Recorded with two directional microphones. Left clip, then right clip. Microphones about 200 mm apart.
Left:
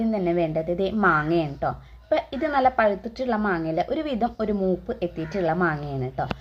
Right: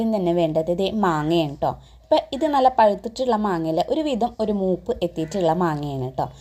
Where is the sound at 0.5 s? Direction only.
25° right (ahead or behind).